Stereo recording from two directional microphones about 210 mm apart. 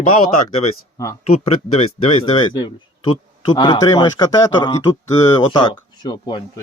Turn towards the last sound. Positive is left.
turn(degrees=20)  # may be behind; listen again after turning